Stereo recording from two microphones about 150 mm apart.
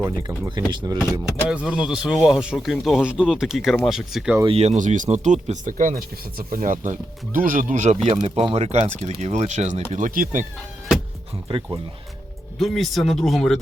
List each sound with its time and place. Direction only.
0.2 s speech: 30° right (ahead or behind)
1.2 s speech: 5° right (ahead or behind)
4.4 s speech: 45° right (ahead or behind)
8.0 s speech: 45° right (ahead or behind); by 10.4 s 60° right (ahead or behind)
11.4 s speech: 35° right (ahead or behind)
12.5 s speech: centre (ahead or behind)